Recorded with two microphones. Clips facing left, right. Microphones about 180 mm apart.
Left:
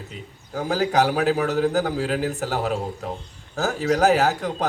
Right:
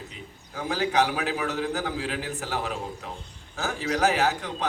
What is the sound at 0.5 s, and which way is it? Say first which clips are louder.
A man's voice: left 4 dB; 40° left (ahead or behind).